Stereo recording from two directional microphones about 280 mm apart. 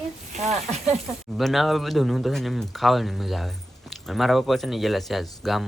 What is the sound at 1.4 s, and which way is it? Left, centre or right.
Speech, centre.